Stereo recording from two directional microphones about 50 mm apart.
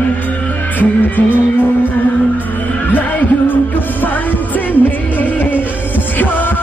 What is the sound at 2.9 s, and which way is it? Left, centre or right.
Heart sounds, left.